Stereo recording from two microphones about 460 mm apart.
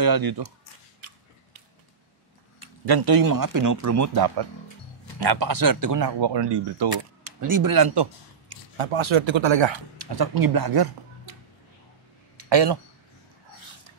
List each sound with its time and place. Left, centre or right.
0.0 s speech: right
2.6 s speech: right
5.2 s speech: right
7.2 s speech: right
12.4 s speech: right